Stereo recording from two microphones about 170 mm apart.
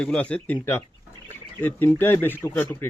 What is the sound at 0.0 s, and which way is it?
Speech, 5° left (ahead or behind).